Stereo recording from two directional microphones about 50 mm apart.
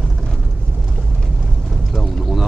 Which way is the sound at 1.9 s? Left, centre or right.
Centre.